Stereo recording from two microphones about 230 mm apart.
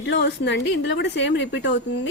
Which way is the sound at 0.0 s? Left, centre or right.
Left.